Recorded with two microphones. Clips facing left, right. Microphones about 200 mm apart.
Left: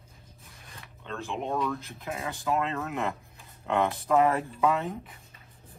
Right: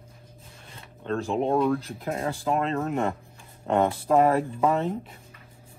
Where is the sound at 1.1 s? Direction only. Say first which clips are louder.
Right 8 dB; 40° right (ahead or behind).